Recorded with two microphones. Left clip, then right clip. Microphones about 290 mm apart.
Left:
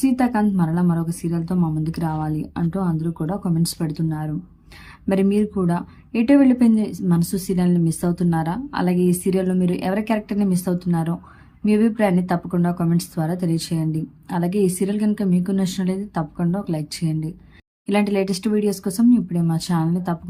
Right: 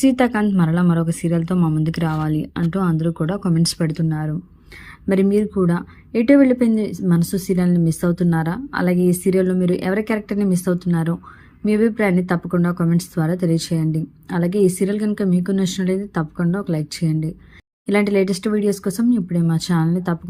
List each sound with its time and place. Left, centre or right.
0.0 s speech: centre
2.6 s speech: centre
3.2 s speech: centre